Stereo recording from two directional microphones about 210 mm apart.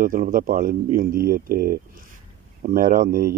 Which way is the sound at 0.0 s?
40° right (ahead or behind).